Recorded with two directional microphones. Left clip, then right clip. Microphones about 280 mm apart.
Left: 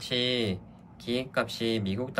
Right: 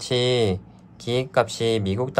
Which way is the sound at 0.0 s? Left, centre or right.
Centre.